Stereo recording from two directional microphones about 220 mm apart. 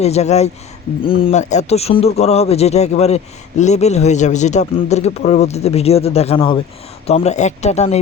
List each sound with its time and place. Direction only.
0.0 s a man's voice: 30° left (ahead or behind)